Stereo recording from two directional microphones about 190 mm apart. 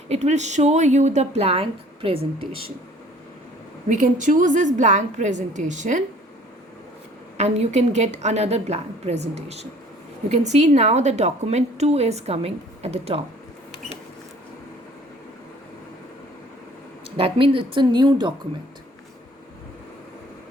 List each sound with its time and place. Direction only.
0.1 s a woman's voice: 35° right (ahead or behind)
3.8 s a woman's voice: 40° right (ahead or behind)
7.3 s a woman's voice: 35° right (ahead or behind)
17.2 s a woman's voice: 30° right (ahead or behind)